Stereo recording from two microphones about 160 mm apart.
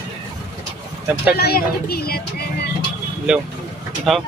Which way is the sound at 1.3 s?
80° left.